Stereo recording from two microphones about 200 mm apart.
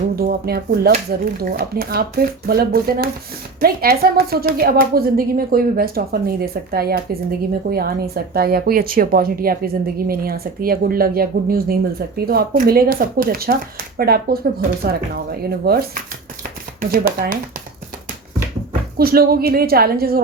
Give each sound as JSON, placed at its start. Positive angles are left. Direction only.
{"t": 0.2, "sound": "a woman's voice", "side_deg": -50}
{"t": 16.4, "sound": "a sound", "side_deg": -45}
{"t": 18.9, "sound": "a woman's voice", "side_deg": -50}